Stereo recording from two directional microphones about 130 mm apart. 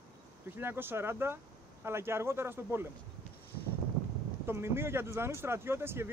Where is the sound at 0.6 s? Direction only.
15° right (ahead or behind).